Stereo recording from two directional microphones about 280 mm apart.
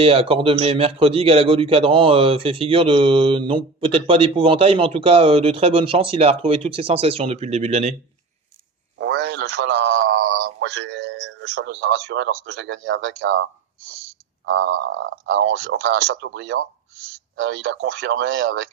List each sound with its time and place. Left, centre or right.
0.0 s a man's voice: centre
9.0 s a sound: right
14.4 s speech: right